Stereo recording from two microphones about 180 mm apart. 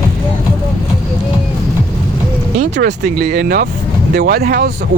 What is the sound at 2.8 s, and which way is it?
Speech, 55° right (ahead or behind).